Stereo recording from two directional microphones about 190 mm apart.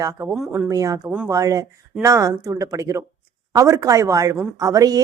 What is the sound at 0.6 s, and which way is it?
Speech, 20° right (ahead or behind).